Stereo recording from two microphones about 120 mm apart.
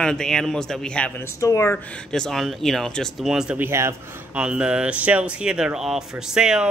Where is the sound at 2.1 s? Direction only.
Centre (ahead or behind); by 3.9 s 20° right (ahead or behind).